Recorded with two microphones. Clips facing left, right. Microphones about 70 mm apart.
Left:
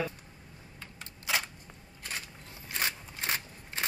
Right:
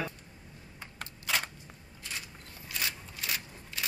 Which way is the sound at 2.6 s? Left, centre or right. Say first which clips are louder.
Left 3 dB; left.